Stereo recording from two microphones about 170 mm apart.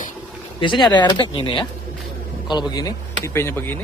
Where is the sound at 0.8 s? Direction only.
25° left (ahead or behind).